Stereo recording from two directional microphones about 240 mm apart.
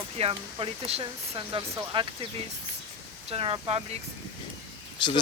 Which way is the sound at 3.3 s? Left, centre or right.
Right.